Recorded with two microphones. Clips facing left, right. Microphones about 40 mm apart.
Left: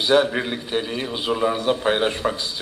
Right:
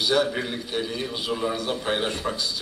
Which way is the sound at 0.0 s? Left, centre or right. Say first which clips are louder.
Left 5 dB; left.